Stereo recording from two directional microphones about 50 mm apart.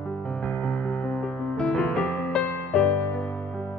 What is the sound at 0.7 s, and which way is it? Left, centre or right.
Music, left.